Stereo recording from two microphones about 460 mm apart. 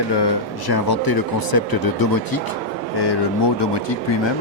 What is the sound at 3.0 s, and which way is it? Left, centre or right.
Speech, left.